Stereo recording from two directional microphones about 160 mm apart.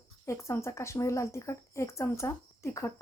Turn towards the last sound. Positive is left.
turn(degrees=20)  # may be behind; listen again after turning